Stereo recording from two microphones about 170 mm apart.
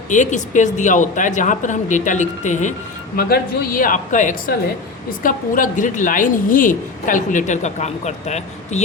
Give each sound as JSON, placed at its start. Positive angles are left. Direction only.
{"t": 0.1, "sound": "a woman's voice", "side_deg": 45}
{"t": 3.2, "sound": "a woman's voice", "side_deg": 65}